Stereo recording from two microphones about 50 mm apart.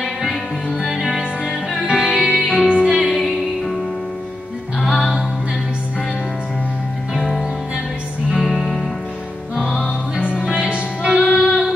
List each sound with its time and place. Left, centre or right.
0.8 s music: centre
2.7 s music: centre
3.0 s music: centre
7.2 s music: centre
9.6 s music: centre
10.3 s music: centre
11.3 s music: centre